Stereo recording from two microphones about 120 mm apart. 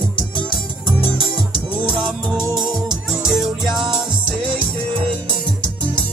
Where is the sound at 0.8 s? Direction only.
35° right (ahead or behind).